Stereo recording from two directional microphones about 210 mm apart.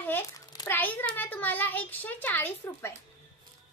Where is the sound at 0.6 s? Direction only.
10° left (ahead or behind).